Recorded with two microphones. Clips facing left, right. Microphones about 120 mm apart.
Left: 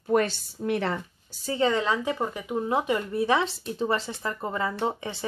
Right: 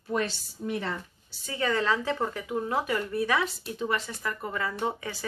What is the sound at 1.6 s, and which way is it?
Speech, 20° left (ahead or behind).